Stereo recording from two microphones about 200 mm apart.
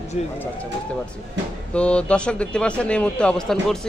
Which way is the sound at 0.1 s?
35° left (ahead or behind).